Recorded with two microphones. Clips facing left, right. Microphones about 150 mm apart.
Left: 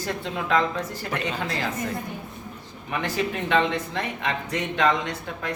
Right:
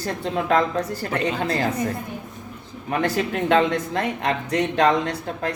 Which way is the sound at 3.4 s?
45° right (ahead or behind).